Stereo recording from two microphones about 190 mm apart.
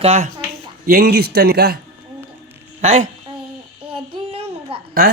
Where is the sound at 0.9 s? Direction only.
55° right (ahead or behind).